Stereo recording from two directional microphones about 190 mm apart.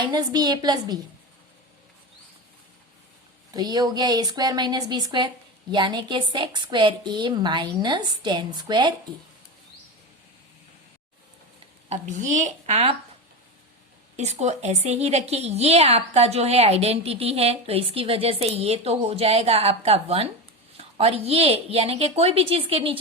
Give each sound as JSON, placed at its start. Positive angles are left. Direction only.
{"t": 0.0, "sound": "a woman's voice", "side_deg": -20}
{"t": 3.5, "sound": "a woman's voice", "side_deg": -20}
{"t": 11.9, "sound": "a woman's voice", "side_deg": -40}
{"t": 14.2, "sound": "a woman's voice", "side_deg": -35}